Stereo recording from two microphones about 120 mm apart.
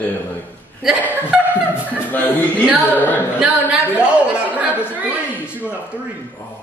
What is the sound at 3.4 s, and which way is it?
Speech, 10° right (ahead or behind).